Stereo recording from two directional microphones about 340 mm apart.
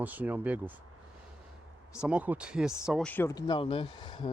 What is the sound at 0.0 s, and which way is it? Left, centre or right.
Speech, centre.